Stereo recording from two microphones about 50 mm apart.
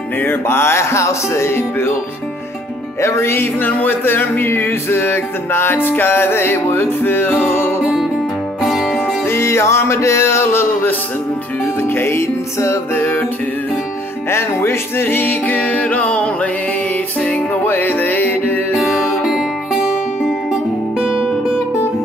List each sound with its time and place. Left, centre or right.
0.2 s music: left
3.0 s music: left
3.6 s music: left
7.8 s music: centre
8.9 s music: left
12.9 s music: left
14.3 s music: left
17.6 s music: left
18.8 s music: centre
21.1 s guitar: centre